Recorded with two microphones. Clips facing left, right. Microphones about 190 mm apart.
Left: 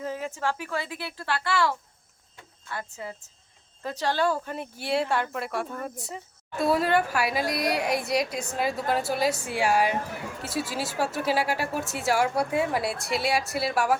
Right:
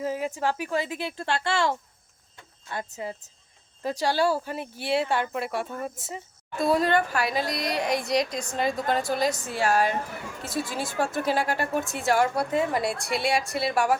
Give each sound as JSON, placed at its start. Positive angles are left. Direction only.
{"t": 0.0, "sound": "a woman's voice", "side_deg": -15}